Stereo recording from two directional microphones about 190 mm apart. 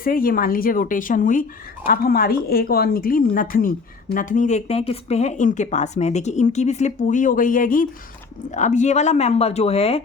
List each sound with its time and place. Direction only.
0.0 s a woman's voice: 50° left (ahead or behind); by 10.0 s 30° left (ahead or behind)